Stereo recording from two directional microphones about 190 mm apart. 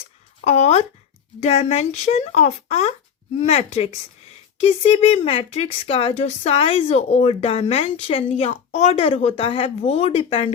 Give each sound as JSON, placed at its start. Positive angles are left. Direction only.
{"t": 0.4, "sound": "speech", "side_deg": 35}